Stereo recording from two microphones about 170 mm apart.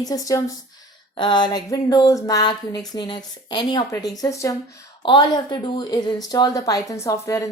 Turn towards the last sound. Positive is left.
turn(degrees=20)  # may be behind; listen again after turning